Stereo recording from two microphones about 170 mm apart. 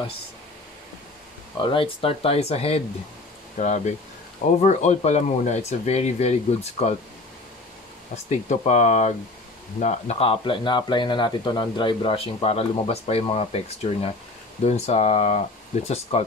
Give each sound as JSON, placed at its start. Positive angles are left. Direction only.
{"t": 1.6, "sound": "speech", "side_deg": 30}
{"t": 8.3, "sound": "speech", "side_deg": 45}